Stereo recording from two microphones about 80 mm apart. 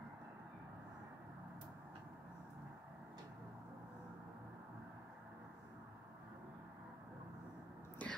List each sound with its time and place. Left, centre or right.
8.0 s whispering: centre